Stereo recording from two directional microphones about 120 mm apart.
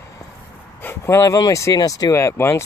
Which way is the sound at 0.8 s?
20° left (ahead or behind).